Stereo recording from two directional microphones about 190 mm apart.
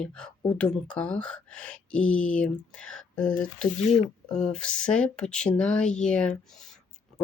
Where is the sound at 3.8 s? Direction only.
35° left (ahead or behind).